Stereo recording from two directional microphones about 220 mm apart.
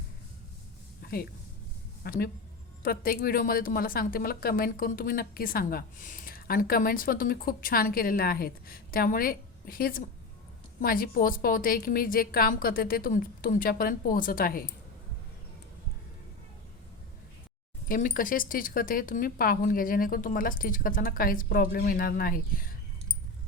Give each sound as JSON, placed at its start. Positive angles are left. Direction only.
{"t": 1.0, "sound": "a woman's voice", "side_deg": 45}
{"t": 17.8, "sound": "a woman's voice", "side_deg": 40}